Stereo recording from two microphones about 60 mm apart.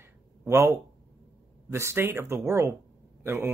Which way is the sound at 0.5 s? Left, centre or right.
Right.